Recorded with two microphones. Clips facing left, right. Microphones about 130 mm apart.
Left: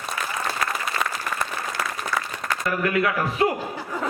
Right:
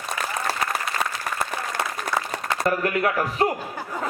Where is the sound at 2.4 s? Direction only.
35° right (ahead or behind).